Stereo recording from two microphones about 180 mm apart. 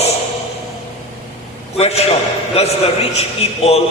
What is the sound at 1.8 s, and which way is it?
A man's voice, 35° left (ahead or behind).